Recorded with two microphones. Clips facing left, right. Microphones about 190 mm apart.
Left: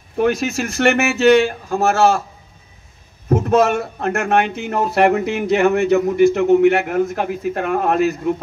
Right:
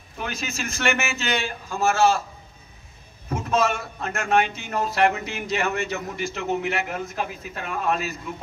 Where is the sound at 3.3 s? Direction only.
60° left (ahead or behind).